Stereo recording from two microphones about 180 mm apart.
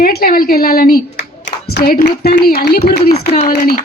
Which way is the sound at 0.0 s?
55° left (ahead or behind).